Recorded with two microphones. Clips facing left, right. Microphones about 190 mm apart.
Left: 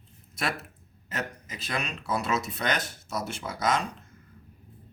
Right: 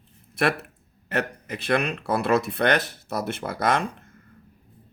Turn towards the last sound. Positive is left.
turn(degrees=-55)  # may be behind; listen again after turning